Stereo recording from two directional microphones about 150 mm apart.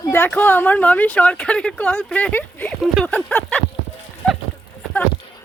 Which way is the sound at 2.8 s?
Centre (ahead or behind).